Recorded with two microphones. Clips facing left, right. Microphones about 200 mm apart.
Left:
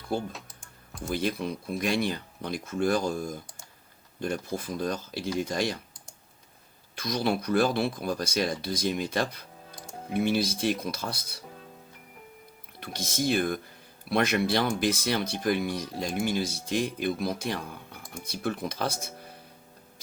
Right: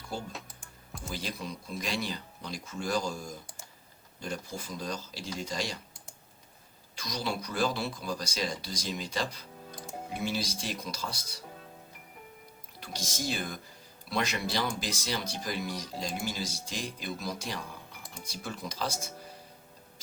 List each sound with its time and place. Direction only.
0.1 s speech: 55° left (ahead or behind)
6.9 s speech: 55° left (ahead or behind)
12.8 s speech: 55° left (ahead or behind)